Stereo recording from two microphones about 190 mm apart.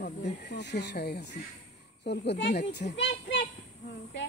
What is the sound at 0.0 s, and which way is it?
A woman's voice, 65° left (ahead or behind).